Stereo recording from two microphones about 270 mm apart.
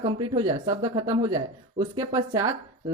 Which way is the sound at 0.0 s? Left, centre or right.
Centre.